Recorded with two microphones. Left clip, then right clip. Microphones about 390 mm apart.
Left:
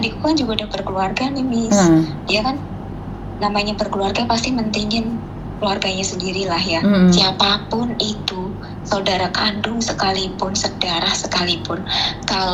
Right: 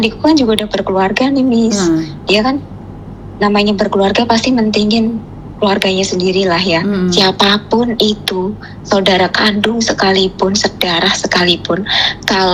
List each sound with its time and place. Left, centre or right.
0.0 s a woman's voice: right